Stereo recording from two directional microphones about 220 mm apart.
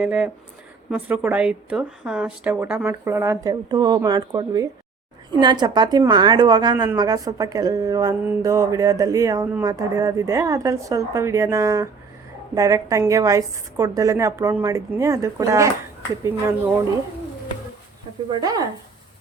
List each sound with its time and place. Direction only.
0.0 s a woman's voice: 5° right (ahead or behind)
18.3 s a woman's voice: 20° right (ahead or behind)